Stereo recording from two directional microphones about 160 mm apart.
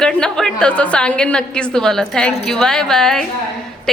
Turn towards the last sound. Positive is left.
turn(degrees=5)  # may be behind; listen again after turning